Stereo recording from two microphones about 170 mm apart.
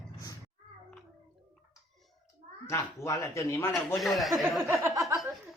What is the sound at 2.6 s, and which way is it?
A man's voice, 15° left (ahead or behind).